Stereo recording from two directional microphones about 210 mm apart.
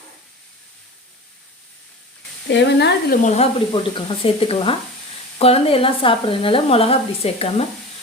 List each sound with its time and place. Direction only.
2.5 s speech: 55° left (ahead or behind)
3.2 s speech: 30° left (ahead or behind)